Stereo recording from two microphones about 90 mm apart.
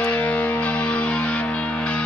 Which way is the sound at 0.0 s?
15° left (ahead or behind).